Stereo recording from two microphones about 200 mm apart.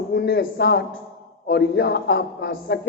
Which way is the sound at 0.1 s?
55° left (ahead or behind).